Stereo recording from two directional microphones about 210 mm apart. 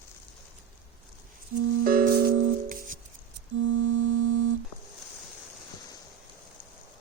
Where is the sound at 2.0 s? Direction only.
50° right (ahead or behind).